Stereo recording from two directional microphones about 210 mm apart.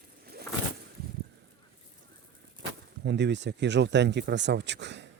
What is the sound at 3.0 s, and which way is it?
Speech, 55° right (ahead or behind).